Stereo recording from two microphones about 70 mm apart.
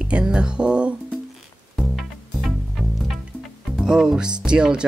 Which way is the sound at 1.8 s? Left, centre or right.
Centre.